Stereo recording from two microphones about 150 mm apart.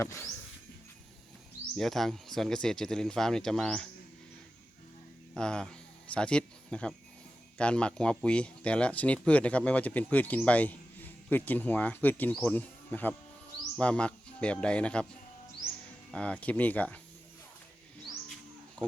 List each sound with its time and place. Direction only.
0.0 s a sound: 20° left (ahead or behind)
1.7 s speech: centre (ahead or behind)
5.3 s speech: 5° left (ahead or behind)
16.1 s speech: 10° left (ahead or behind)